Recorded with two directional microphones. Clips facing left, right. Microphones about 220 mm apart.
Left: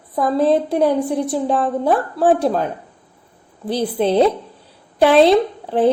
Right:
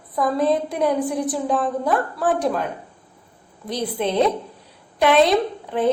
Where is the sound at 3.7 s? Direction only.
30° left (ahead or behind).